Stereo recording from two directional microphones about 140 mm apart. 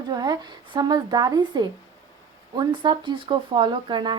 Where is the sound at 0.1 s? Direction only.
30° right (ahead or behind).